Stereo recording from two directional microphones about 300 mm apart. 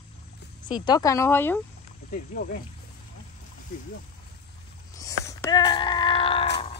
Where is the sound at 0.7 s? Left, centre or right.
Centre.